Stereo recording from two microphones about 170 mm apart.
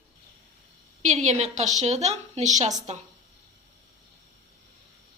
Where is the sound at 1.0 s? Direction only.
45° right (ahead or behind).